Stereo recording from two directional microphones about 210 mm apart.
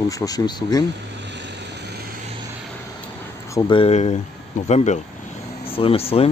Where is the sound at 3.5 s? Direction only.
20° left (ahead or behind).